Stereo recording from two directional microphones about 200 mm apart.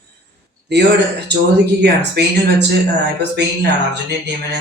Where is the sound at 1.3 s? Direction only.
55° right (ahead or behind).